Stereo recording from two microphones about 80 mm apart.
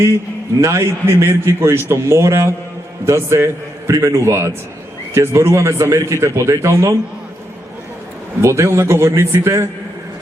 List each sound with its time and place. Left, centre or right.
0.6 s a man's voice: right
8.4 s a man's voice: right